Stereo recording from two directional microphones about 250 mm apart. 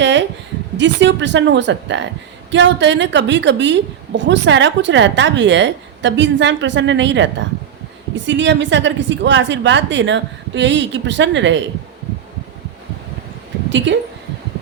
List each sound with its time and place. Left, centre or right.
0.0 s a sound: right
0.8 s a woman's voice: right
13.7 s a woman's voice: right